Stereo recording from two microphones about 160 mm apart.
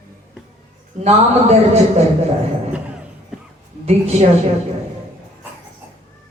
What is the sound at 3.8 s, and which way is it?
Speech, 40° right (ahead or behind).